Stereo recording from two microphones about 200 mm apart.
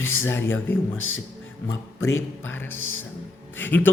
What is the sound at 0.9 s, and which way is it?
Speech, 80° left.